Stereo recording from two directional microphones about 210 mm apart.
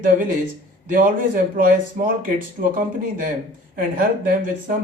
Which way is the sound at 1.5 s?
40° right (ahead or behind).